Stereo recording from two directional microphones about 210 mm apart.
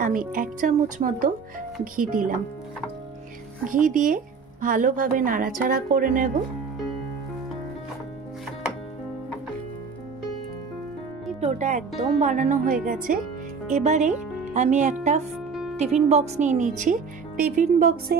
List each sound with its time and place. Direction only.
0.0 s speech: 40° right (ahead or behind)
3.6 s speech: 40° right (ahead or behind)
11.4 s speech: 35° right (ahead or behind)